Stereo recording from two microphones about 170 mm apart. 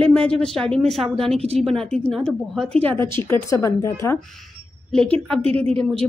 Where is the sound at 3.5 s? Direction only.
20° left (ahead or behind).